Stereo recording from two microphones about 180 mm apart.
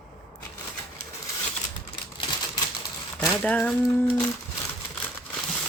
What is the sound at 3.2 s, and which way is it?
Speech, 5° left (ahead or behind).